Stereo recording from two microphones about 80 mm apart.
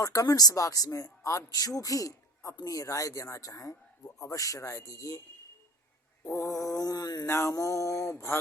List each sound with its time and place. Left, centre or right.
0.0 s speech: left
6.3 s speech: left
7.3 s mantra: left
7.5 s speech: left